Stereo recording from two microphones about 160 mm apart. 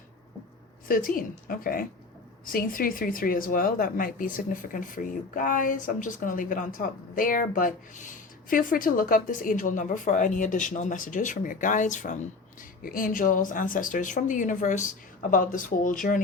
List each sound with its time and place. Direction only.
0.9 s speech: 60° left (ahead or behind)
12.8 s speech: 60° left (ahead or behind)